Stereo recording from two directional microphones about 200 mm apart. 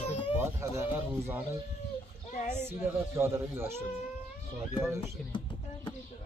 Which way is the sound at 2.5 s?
10° right (ahead or behind).